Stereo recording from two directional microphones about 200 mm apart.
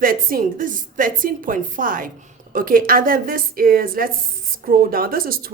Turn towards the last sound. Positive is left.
turn(degrees=-45)  # may be behind; listen again after turning